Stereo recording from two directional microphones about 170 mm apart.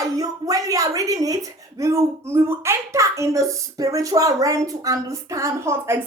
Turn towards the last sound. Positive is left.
turn(degrees=-15)  # may be behind; listen again after turning